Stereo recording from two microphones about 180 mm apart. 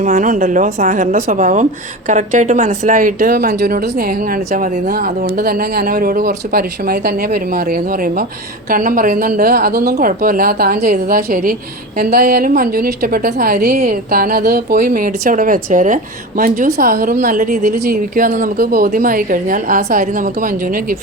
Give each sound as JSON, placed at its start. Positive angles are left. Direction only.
{"t": 0.0, "sound": "a woman's voice", "side_deg": -45}